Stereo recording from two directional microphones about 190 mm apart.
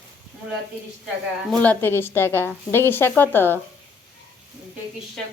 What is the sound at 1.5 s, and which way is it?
Speech, 10° left (ahead or behind).